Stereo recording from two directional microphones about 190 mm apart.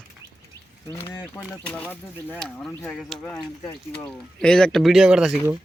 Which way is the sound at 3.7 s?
20° left (ahead or behind).